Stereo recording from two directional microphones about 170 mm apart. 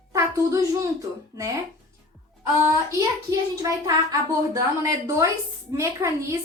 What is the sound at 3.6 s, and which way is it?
A woman's voice, 20° right (ahead or behind).